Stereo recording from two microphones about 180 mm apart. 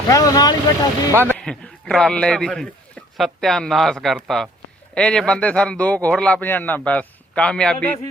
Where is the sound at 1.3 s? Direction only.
5° left (ahead or behind).